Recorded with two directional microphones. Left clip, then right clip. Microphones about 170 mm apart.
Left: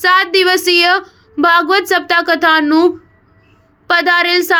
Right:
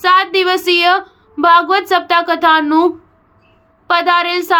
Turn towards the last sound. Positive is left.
turn(degrees=20)  # may be behind; listen again after turning